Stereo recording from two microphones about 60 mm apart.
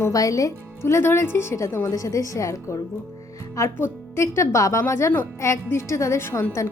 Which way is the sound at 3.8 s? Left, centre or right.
Left.